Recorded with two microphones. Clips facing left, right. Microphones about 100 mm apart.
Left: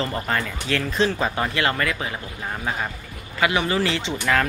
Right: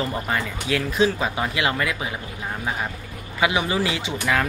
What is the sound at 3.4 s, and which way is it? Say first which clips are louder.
A man's voice: left 1 dB; 15° right (ahead or behind).